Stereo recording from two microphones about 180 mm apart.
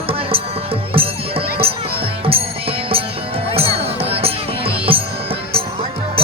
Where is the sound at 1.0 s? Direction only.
30° right (ahead or behind).